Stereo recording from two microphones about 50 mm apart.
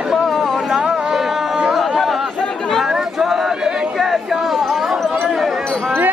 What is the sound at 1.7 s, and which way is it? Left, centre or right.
Chatter, centre.